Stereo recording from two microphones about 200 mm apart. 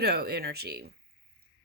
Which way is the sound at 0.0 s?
55° right (ahead or behind).